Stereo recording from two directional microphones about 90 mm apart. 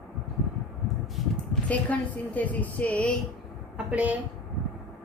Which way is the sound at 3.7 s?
15° right (ahead or behind).